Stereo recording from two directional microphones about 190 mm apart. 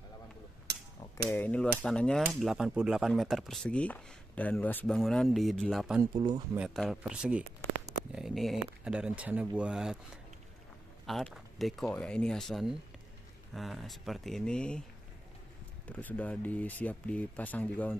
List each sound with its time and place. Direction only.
1.1 s speech: 10° left (ahead or behind)
6.1 s speech: 25° right (ahead or behind)
6.5 s speech: 5° right (ahead or behind)
11.1 s speech: centre (ahead or behind)
15.9 s speech: 10° left (ahead or behind)